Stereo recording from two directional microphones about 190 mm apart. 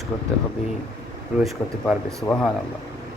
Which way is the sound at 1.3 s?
Centre (ahead or behind).